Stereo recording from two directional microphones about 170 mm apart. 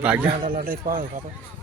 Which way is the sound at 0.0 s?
10° right (ahead or behind).